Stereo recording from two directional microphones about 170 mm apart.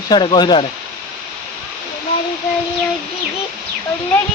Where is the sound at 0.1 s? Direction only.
25° left (ahead or behind).